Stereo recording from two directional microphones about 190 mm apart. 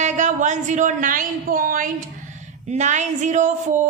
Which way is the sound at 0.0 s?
40° right (ahead or behind).